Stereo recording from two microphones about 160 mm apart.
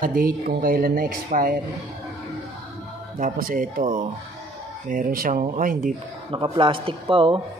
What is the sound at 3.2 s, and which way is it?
Speech, 60° right (ahead or behind).